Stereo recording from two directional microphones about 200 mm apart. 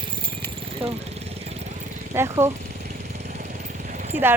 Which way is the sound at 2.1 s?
15° right (ahead or behind).